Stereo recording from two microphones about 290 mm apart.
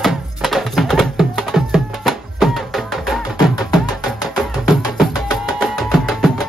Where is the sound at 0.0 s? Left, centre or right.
Centre.